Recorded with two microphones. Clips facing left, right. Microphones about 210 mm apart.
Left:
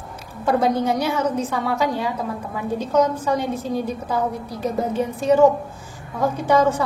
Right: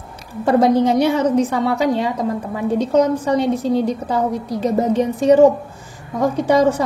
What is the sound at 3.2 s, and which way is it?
A woman's voice, 75° right (ahead or behind).